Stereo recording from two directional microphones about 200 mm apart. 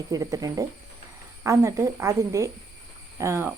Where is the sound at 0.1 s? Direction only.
15° right (ahead or behind).